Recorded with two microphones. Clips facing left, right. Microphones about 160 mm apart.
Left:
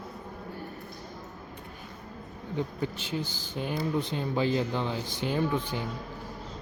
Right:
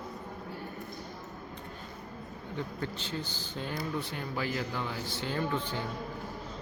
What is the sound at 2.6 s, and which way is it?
Speech, 15° left (ahead or behind).